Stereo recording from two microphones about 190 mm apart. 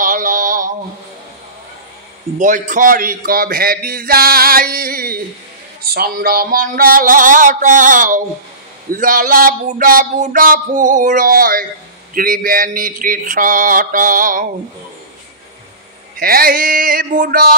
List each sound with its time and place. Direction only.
0.0 s a sound: 45° right (ahead or behind)
2.3 s a man's voice: 40° right (ahead or behind)
16.2 s a man's voice: 50° right (ahead or behind)